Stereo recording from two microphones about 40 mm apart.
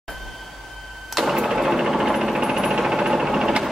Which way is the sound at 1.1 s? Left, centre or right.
Centre.